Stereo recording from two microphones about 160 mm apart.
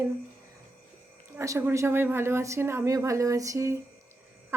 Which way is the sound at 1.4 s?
15° right (ahead or behind).